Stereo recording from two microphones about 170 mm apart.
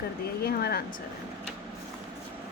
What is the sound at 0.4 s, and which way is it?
Speech, 65° left (ahead or behind).